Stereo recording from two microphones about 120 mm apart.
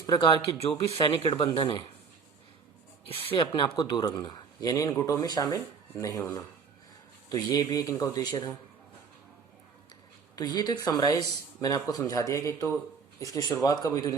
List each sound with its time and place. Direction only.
0.0 s speech: 40° left (ahead or behind)
3.1 s speech: 50° left (ahead or behind)
10.3 s speech: 35° left (ahead or behind)